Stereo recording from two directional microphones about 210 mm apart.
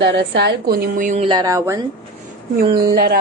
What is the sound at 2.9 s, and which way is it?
Speech, 45° right (ahead or behind).